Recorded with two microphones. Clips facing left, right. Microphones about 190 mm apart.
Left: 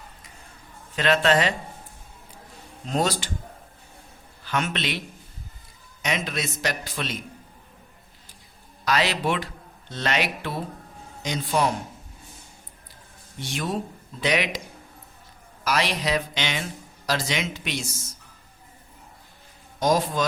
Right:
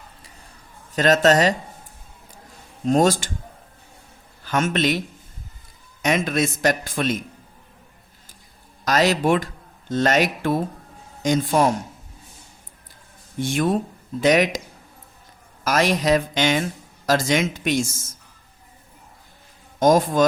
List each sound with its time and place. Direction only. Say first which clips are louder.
0.9 s a man's voice: right 4 dB; 40° right (ahead or behind)
2.8 s a man's voice: right 8 dB; 45° right (ahead or behind)
4.4 s a man's voice: right 7 dB; 45° right (ahead or behind)
8.8 s a man's voice: right 5 dB; 45° right (ahead or behind)
13.4 s a man's voice: right 8 dB; 50° right (ahead or behind)
15.6 s a man's voice: right 6 dB; 45° right (ahead or behind)
19.8 s a man's voice: right 6 dB; 50° right (ahead or behind)